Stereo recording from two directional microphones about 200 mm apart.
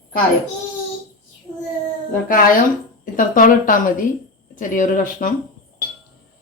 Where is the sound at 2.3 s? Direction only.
45° left (ahead or behind).